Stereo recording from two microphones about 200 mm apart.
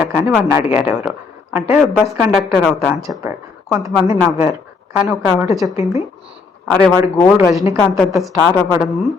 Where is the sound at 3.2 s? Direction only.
15° right (ahead or behind).